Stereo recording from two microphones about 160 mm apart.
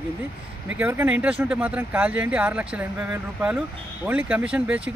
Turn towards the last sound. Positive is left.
turn(degrees=-5)  # may be behind; listen again after turning